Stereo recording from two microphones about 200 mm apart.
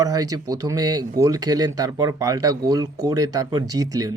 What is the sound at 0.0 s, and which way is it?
Speech, 15° right (ahead or behind).